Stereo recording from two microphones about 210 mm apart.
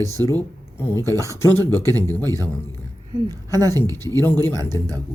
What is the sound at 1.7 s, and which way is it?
Speech, 15° right (ahead or behind).